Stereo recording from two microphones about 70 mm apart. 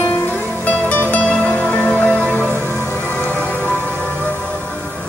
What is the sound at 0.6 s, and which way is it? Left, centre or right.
Music, left.